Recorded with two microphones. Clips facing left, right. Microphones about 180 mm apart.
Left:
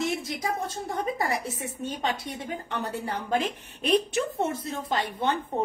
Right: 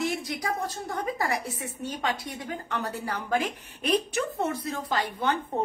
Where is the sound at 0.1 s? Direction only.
25° left (ahead or behind).